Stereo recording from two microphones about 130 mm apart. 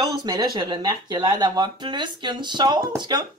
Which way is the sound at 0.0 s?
35° right (ahead or behind).